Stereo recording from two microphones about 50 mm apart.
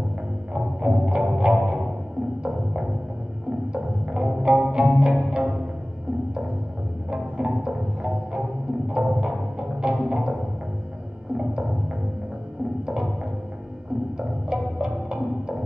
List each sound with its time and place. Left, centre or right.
1.0 s music: centre
7.1 s music: centre
14.1 s music: centre